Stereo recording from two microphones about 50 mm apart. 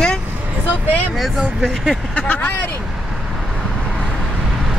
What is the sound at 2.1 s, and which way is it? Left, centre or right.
Speech, left.